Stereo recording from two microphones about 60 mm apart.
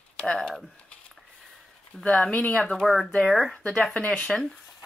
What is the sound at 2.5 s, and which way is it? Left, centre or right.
Speech, centre.